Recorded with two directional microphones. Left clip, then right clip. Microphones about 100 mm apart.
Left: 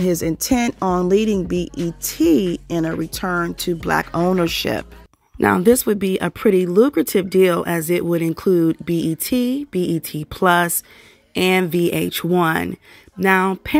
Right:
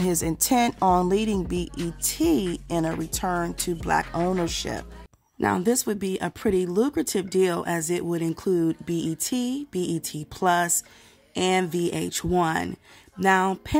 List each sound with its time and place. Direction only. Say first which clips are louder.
0.0 s speech: left 6 dB; 10° left (ahead or behind)
0.7 s a woman's voice: left 1 dB; 5° left (ahead or behind)
1.1 s speech: left 7 dB; 15° left (ahead or behind)
3.9 s speech: left 5 dB; 40° left (ahead or behind)
8.5 s speech: left 7 dB; 25° left (ahead or behind)